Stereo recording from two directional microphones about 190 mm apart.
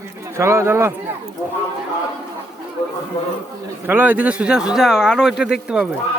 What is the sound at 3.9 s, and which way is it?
Speech, 10° right (ahead or behind).